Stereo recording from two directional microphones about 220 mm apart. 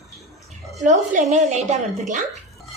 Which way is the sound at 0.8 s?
35° right (ahead or behind).